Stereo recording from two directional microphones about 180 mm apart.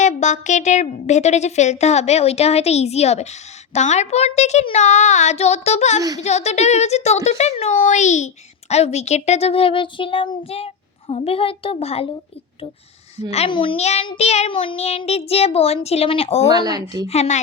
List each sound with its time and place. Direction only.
0.0 s speech: 40° left (ahead or behind)
13.3 s speech: 30° left (ahead or behind)
16.5 s speech: 20° right (ahead or behind)
17.1 s speech: 40° left (ahead or behind)